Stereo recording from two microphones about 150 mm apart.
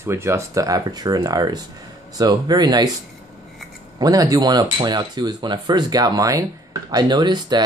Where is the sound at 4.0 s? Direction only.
25° right (ahead or behind).